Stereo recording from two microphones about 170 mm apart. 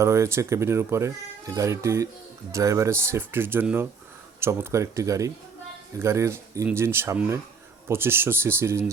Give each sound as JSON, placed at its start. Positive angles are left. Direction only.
{"t": 0.0, "sound": "speech", "side_deg": -15}